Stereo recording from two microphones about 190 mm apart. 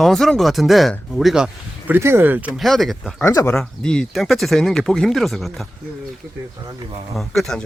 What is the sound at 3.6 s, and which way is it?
Speech, 5° left (ahead or behind).